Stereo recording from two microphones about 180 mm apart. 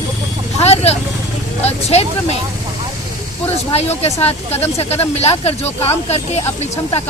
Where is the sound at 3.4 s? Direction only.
35° left (ahead or behind).